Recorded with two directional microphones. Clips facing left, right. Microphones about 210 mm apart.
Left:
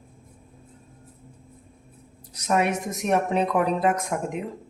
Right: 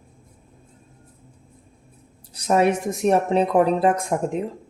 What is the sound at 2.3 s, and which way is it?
Speech, 30° right (ahead or behind).